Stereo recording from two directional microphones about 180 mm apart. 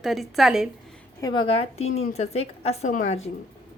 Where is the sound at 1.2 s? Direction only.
25° left (ahead or behind).